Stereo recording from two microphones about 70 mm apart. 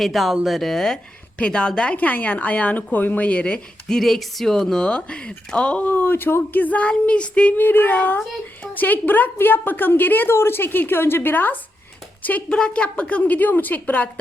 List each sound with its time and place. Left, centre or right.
0.0 s a woman's voice: centre
7.6 s a woman's voice: left
8.2 s speech: centre
8.7 s a woman's voice: left